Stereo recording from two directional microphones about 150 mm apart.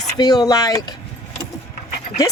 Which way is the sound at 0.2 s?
25° left (ahead or behind).